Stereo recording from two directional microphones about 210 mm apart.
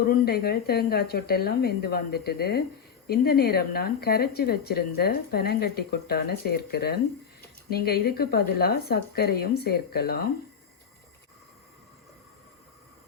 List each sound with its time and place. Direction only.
0.1 s speech: 45° left (ahead or behind)